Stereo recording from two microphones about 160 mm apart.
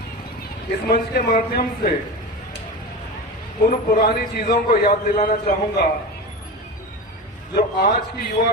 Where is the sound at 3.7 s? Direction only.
70° left (ahead or behind).